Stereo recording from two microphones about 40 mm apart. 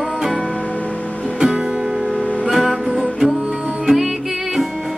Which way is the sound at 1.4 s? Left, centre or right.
Centre.